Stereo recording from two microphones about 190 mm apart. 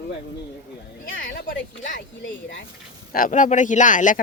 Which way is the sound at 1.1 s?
80° left.